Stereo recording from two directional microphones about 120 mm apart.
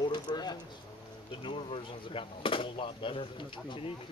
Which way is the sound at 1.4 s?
45° left (ahead or behind).